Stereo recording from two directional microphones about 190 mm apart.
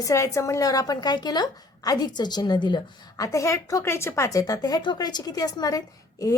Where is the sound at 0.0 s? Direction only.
15° left (ahead or behind).